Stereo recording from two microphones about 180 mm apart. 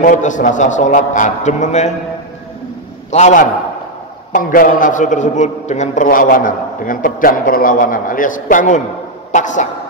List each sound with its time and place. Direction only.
0.0 s a man's voice: 45° left (ahead or behind)
3.1 s a man's voice: 40° left (ahead or behind)